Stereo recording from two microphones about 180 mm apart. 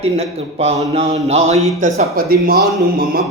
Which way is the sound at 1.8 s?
50° right (ahead or behind).